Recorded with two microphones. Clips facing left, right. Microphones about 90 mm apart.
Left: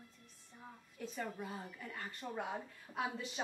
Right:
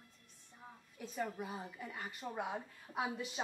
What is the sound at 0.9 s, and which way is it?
A woman's voice, 5° right (ahead or behind).